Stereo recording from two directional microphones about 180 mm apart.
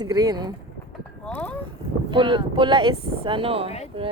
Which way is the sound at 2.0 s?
25° right (ahead or behind).